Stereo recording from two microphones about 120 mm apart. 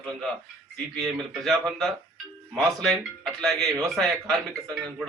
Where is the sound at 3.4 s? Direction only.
5° left (ahead or behind).